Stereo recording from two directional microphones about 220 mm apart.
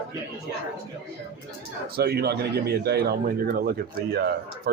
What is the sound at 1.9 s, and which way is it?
Speech, 45° right (ahead or behind).